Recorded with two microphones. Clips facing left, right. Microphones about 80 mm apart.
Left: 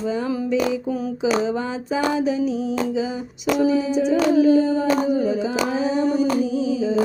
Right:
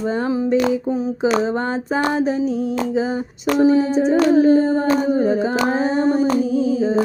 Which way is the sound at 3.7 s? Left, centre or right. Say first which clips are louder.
Right 4 dB; right.